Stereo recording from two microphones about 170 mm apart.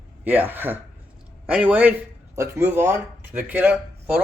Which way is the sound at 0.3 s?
10° right (ahead or behind).